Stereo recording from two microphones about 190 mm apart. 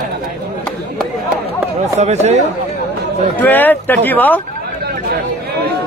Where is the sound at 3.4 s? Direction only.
10° left (ahead or behind).